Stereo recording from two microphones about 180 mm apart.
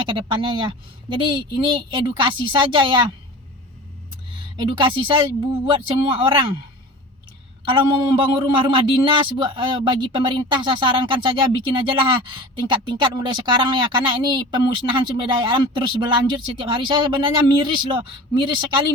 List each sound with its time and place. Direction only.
0.0 s a man's voice: 25° right (ahead or behind)
4.6 s a man's voice: 25° right (ahead or behind)
7.6 s a man's voice: 30° right (ahead or behind)